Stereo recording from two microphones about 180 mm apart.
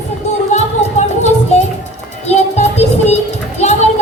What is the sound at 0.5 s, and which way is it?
Music, 40° left (ahead or behind).